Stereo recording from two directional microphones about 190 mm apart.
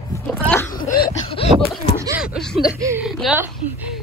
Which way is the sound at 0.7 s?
50° left (ahead or behind).